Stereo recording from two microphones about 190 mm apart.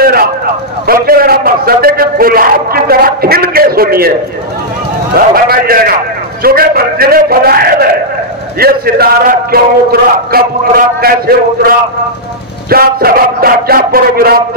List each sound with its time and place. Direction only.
0.0 s a sound: 50° right (ahead or behind)
0.8 s a man's voice: 50° right (ahead or behind)
5.1 s a man's voice: 50° right (ahead or behind)